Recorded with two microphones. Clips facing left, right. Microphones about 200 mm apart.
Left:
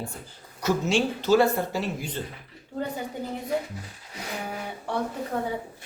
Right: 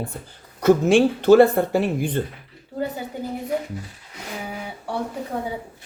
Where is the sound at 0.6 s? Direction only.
55° right (ahead or behind).